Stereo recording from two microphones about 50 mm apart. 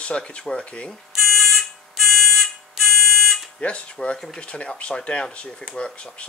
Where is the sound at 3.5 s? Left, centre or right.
Left.